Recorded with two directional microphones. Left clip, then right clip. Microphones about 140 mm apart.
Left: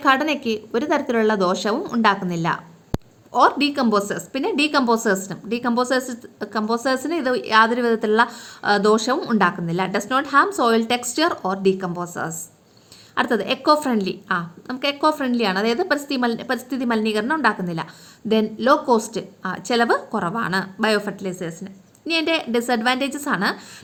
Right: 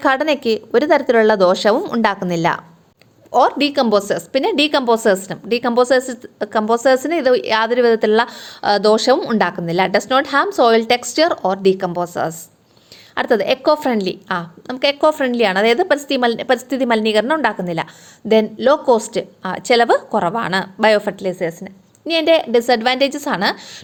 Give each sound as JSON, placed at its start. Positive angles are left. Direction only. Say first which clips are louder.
{"t": 0.0, "sound": "a woman's voice", "louder": "right 3 dB", "side_deg": -45}
{"t": 3.3, "sound": "a woman's voice", "louder": "right 3 dB", "side_deg": -40}